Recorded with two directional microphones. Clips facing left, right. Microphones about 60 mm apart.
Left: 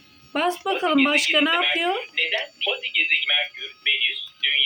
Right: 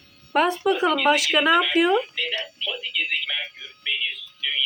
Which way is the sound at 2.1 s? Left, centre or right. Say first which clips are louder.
Left 3 dB; left.